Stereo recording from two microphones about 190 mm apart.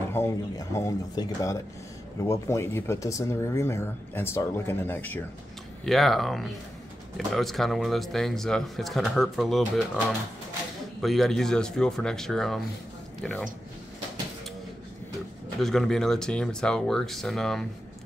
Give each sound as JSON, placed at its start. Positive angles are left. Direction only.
{"t": 0.1, "sound": "speech", "side_deg": 15}
{"t": 15.6, "sound": "speech", "side_deg": 0}